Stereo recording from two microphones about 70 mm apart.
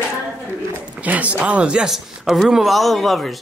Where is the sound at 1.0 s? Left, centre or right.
Right.